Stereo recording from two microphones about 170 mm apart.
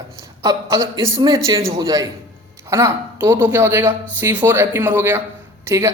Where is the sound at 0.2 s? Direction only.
20° right (ahead or behind).